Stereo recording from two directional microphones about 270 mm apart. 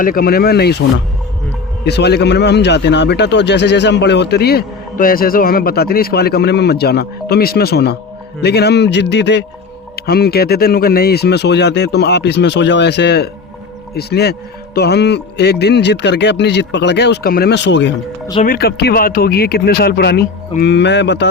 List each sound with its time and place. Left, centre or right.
0.0 s a man's voice: left
1.8 s a man's voice: left